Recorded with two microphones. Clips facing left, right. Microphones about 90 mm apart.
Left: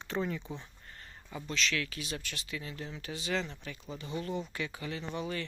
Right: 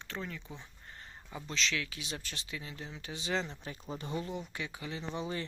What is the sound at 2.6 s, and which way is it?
Speech, 15° right (ahead or behind).